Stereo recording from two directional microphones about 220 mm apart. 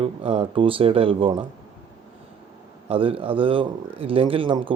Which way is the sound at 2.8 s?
25° right (ahead or behind).